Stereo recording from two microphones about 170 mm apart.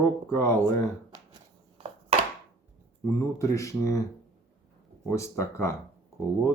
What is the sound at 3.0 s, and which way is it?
Speech, 20° left (ahead or behind).